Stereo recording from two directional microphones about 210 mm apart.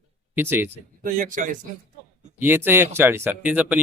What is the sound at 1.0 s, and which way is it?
Speech, 40° right (ahead or behind).